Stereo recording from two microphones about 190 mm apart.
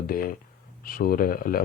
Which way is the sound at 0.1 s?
50° left (ahead or behind).